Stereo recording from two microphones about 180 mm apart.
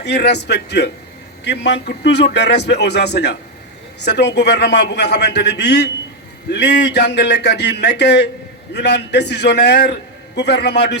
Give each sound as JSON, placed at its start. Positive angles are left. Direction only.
{"t": 0.0, "sound": "a man's voice", "side_deg": 65}